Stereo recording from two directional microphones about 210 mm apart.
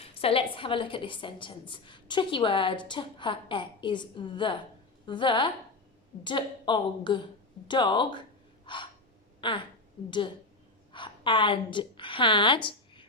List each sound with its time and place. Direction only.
0.0 s a woman's voice: 25° left (ahead or behind)
8.6 s gasp: 20° left (ahead or behind)
9.4 s a woman's voice: 25° left (ahead or behind)